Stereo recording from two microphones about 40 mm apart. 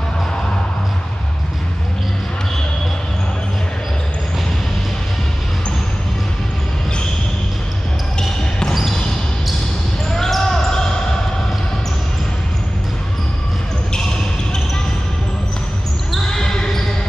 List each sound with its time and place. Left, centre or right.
8.2 s basketball bounce: centre
10.1 s basketball bounce: centre
16.3 s basketball bounce: centre